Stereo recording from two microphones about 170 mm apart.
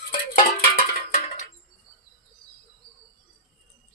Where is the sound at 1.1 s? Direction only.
45° left (ahead or behind).